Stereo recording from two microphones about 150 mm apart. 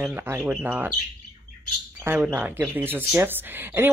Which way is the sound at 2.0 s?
15° right (ahead or behind).